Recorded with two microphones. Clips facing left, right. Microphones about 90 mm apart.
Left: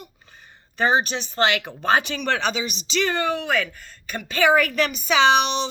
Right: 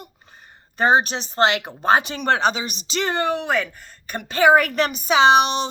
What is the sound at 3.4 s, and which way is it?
A woman's voice, 30° right (ahead or behind).